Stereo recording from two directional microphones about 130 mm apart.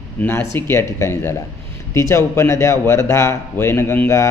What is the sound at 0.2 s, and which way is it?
A man's voice, 20° left (ahead or behind).